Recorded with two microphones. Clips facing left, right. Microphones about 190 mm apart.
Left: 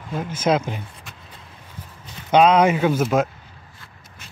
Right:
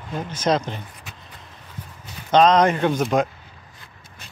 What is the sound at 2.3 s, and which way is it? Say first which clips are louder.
Speech: left 1 dB; 10° left (ahead or behind).